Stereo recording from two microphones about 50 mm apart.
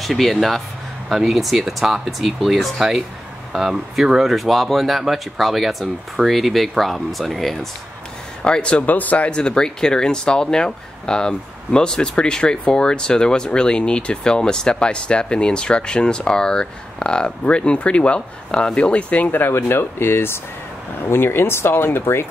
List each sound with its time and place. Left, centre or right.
0.0 s speech: centre
8.4 s speech: left
9.4 s speech: centre
19.3 s speech: left